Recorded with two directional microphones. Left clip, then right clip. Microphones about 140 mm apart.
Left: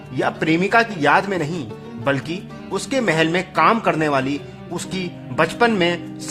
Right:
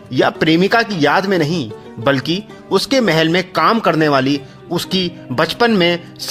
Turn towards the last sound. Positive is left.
turn(degrees=-40)  # may be behind; listen again after turning